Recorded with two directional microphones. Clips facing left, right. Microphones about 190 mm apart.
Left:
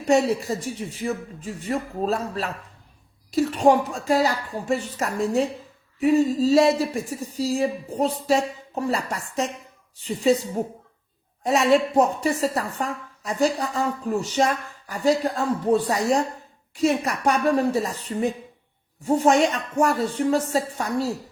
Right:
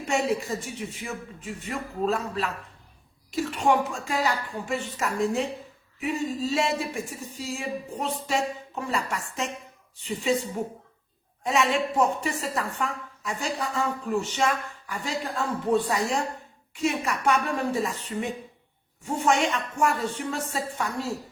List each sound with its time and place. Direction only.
0.1 s speech: 35° left (ahead or behind)